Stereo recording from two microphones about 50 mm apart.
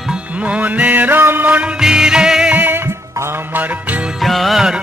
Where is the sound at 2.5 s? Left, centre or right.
Right.